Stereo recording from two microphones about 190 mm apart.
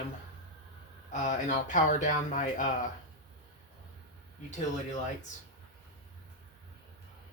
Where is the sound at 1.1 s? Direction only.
40° left (ahead or behind).